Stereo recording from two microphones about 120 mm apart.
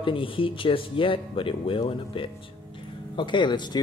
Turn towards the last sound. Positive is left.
turn(degrees=40)  # may be behind; listen again after turning